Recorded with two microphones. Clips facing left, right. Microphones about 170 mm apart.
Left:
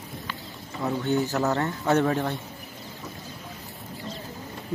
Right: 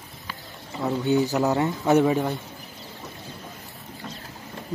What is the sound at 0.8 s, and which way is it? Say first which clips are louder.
Speech: right 3 dB; 15° right (ahead or behind).